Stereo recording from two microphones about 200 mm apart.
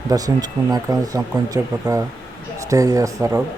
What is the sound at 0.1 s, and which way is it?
Speech, 20° right (ahead or behind).